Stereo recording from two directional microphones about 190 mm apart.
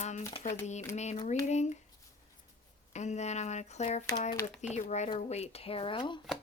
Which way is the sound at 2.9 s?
35° left (ahead or behind).